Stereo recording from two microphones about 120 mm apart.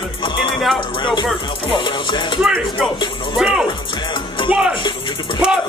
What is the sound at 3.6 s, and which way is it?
Music, 40° left (ahead or behind).